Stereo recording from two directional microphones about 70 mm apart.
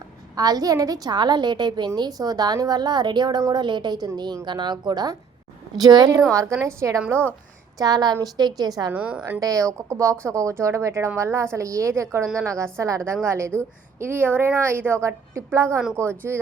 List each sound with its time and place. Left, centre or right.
0.3 s a woman's voice: right
2.0 s a woman's voice: right
4.4 s a woman's voice: right
5.7 s a woman's voice: right
6.3 s speech: right
7.8 s a woman's voice: right
8.9 s a woman's voice: centre
9.4 s a woman's voice: right